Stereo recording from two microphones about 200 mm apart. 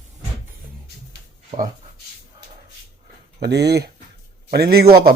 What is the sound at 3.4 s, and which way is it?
A man's voice, 55° right (ahead or behind).